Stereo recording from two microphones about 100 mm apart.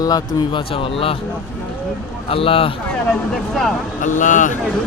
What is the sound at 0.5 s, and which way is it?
Speech, 60° left (ahead or behind).